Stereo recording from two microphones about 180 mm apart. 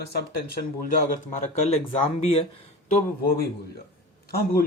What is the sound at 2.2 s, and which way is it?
Speech, 30° left (ahead or behind).